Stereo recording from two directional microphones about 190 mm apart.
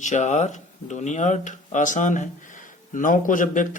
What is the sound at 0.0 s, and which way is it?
Speech, 40° left (ahead or behind).